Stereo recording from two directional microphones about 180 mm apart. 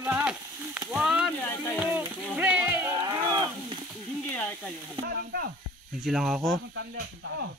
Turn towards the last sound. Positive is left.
turn(degrees=-90)